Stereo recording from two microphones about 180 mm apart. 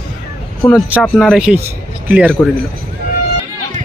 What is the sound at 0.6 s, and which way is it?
A man's voice, 15° left (ahead or behind).